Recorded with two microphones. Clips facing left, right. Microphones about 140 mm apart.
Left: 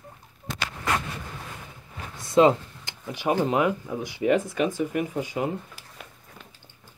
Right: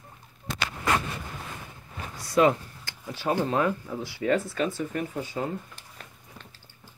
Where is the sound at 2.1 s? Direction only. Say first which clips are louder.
Left 3 dB; 25° left (ahead or behind).